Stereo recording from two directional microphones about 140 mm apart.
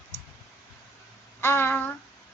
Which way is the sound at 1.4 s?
15° left (ahead or behind).